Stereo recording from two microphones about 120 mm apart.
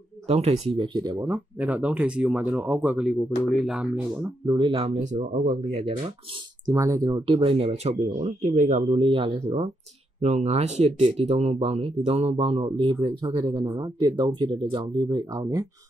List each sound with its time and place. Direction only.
0.3 s speech: 60° right (ahead or behind)
1.2 s speech: 15° right (ahead or behind)
3.1 s speech: 5° left (ahead or behind)
3.6 s speech: 5° right (ahead or behind)
4.5 s speech: 35° right (ahead or behind)
5.0 s speech: 90° right; by 5.9 s 70° right (ahead or behind)
6.7 s speech: 25° right (ahead or behind)
7.2 s speech: 50° right (ahead or behind); by 8.8 s 90° right
8.8 s speech: 50° right (ahead or behind)
10.2 s speech: 70° right (ahead or behind); by 15.6 s 35° right (ahead or behind)